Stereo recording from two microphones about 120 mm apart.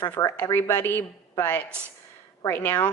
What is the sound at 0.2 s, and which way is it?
Speech, 30° left (ahead or behind).